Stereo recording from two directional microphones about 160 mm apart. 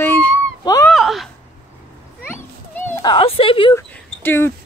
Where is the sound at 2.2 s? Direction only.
15° left (ahead or behind).